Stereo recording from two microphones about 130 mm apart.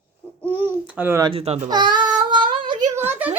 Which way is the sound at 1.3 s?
50° right (ahead or behind).